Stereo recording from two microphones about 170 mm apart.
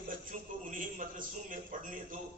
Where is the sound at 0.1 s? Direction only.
50° right (ahead or behind).